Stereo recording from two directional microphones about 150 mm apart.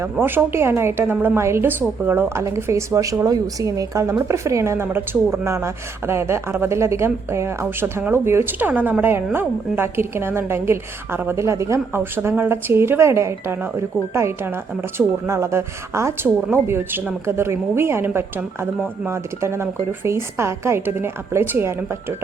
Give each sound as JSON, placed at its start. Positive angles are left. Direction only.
{"t": 0.0, "sound": "speech", "side_deg": -15}